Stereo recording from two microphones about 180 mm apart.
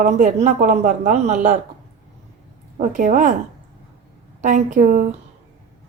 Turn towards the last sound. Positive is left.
turn(degrees=-45)  # may be behind; listen again after turning